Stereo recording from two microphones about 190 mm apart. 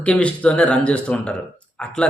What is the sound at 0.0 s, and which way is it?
Speech, 5° left (ahead or behind).